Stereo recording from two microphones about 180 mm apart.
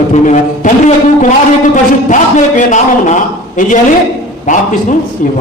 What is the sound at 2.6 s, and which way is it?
A man's voice, 45° left (ahead or behind).